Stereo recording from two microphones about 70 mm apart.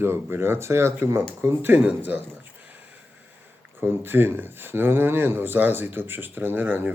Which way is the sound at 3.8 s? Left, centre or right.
Right.